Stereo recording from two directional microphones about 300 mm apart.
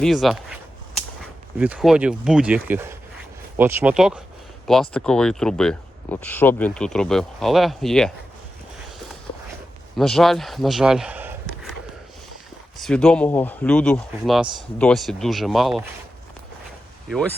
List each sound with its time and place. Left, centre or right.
0.0 s speech: centre
1.5 s speech: centre
10.0 s speech: centre
12.8 s speech: centre